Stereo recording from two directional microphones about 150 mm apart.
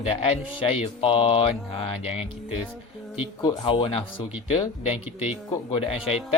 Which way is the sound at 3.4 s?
35° left (ahead or behind).